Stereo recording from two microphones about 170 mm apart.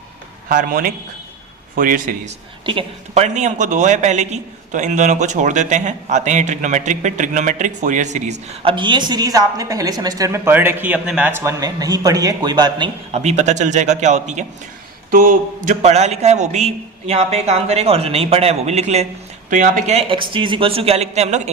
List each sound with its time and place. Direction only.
0.4 s a man's voice: 55° right (ahead or behind)
2.6 s a man's voice: 30° right (ahead or behind)
3.2 s a man's voice: 45° right (ahead or behind)
8.7 s speech: 30° right (ahead or behind)
13.1 s a man's voice: 40° right (ahead or behind)
15.1 s a man's voice: 55° right (ahead or behind)